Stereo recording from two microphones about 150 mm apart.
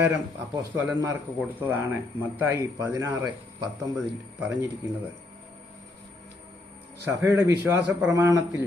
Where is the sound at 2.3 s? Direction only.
15° right (ahead or behind).